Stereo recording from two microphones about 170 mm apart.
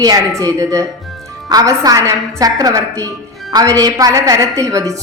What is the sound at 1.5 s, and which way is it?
A woman's voice, 20° right (ahead or behind).